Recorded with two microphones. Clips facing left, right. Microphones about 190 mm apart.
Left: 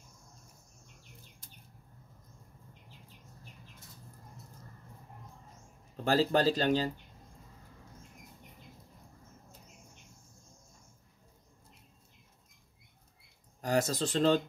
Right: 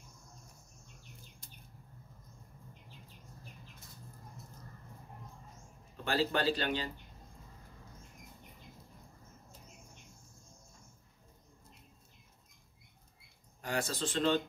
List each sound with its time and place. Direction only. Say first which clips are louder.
6.0 s speech: left 5 dB; 40° left (ahead or behind)
13.6 s speech: left 6 dB; 40° left (ahead or behind)